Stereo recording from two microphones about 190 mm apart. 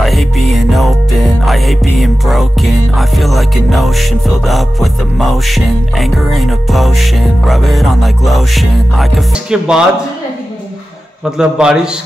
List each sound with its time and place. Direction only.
0.0 s music: centre (ahead or behind)
11.3 s a man's voice: 5° right (ahead or behind)